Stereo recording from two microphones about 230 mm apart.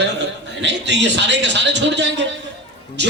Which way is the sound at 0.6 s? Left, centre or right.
Right.